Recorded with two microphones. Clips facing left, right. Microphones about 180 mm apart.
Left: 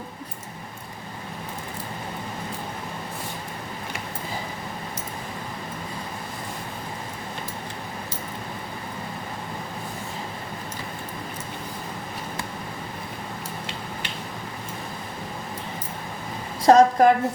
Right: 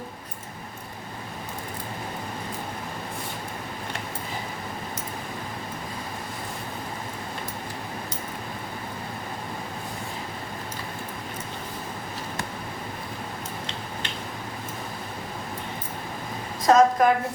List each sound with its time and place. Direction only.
16.6 s a woman's voice: 30° left (ahead or behind)